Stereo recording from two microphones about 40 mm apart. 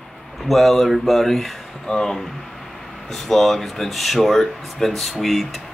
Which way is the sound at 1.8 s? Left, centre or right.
Centre.